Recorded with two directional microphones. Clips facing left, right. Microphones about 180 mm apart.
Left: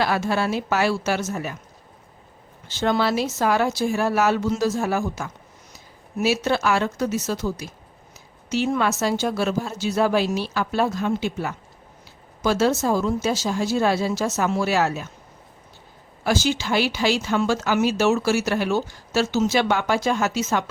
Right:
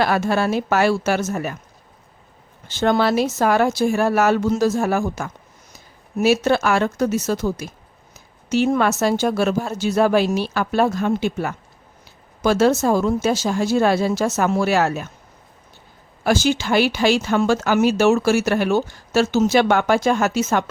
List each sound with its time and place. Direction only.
0.0 s speech: 50° right (ahead or behind)
2.7 s speech: 55° right (ahead or behind)
16.2 s speech: 55° right (ahead or behind)